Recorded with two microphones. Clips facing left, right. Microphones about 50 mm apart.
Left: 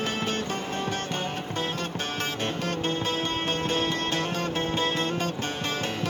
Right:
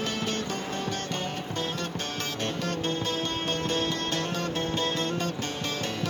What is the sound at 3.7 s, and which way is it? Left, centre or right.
Music, left.